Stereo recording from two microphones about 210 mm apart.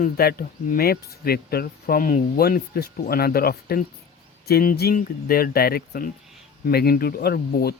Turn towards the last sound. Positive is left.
turn(degrees=50)  # may be behind; listen again after turning